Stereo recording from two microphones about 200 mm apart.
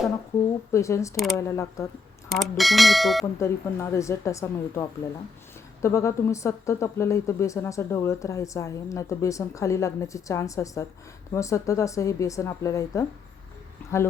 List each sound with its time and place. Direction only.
0.7 s speech: 15° left (ahead or behind)
2.3 s speech: centre (ahead or behind)
3.3 s speech: 15° left (ahead or behind)